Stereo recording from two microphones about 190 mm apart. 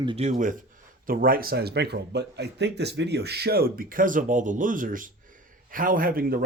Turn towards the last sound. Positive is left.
turn(degrees=-50)  # may be behind; listen again after turning